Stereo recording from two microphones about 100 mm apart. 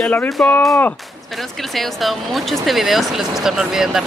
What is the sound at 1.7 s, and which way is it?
Speech, centre (ahead or behind).